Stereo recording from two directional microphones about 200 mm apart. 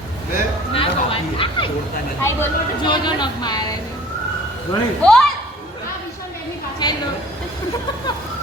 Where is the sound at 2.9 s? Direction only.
20° left (ahead or behind).